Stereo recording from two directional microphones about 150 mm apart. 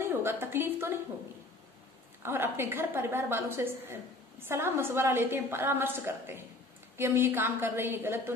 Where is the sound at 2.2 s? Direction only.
15° right (ahead or behind).